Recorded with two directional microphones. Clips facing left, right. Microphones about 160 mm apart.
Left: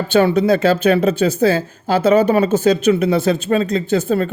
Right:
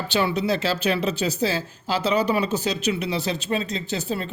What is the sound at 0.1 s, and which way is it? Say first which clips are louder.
Speech: left 9 dB; 50° left (ahead or behind).